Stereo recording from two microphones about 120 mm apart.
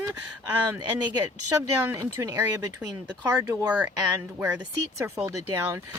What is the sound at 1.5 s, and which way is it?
Speech, 25° right (ahead or behind).